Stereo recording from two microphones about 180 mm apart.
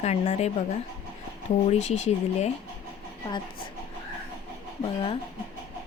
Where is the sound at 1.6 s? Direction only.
40° left (ahead or behind).